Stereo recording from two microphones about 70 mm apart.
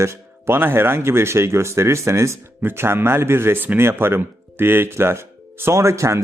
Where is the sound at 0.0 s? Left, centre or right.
Right.